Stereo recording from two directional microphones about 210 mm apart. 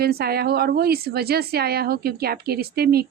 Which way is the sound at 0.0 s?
45° right (ahead or behind).